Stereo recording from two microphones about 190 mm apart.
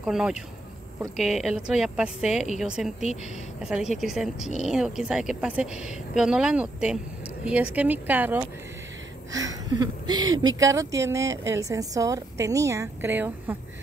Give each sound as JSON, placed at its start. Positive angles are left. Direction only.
{"t": 0.0, "sound": "a woman's voice", "side_deg": -5}